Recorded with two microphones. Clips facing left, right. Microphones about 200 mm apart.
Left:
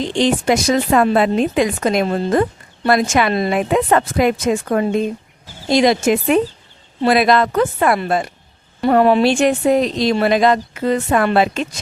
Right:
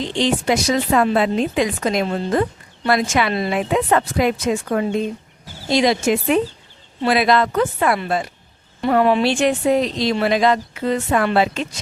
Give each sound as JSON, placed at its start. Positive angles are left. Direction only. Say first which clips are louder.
{"t": 0.2, "sound": "a woman's voice", "louder": "left 3 dB", "side_deg": 50}